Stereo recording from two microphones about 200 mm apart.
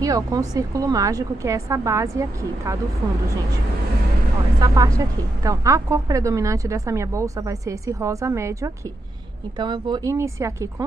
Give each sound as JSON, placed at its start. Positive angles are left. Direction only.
{"t": 0.0, "sound": "a woman's voice", "side_deg": -15}
{"t": 4.6, "sound": "a woman's voice", "side_deg": -15}